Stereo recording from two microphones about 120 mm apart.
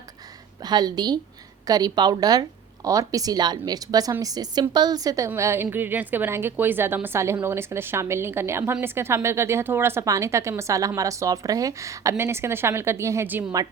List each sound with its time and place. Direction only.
0.6 s a woman's voice: 35° right (ahead or behind); by 13.5 s 15° right (ahead or behind)